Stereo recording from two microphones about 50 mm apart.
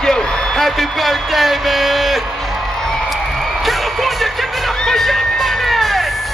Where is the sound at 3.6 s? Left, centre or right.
Centre.